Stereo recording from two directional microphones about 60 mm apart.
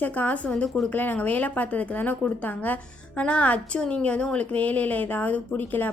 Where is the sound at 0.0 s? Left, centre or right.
Left.